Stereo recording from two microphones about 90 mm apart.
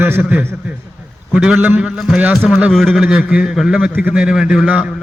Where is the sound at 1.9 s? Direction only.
Centre (ahead or behind).